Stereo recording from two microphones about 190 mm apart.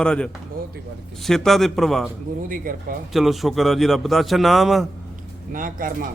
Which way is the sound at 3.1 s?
Centre (ahead or behind).